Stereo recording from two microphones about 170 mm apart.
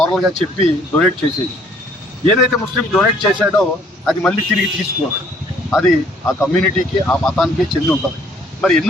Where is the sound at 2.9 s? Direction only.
Centre (ahead or behind).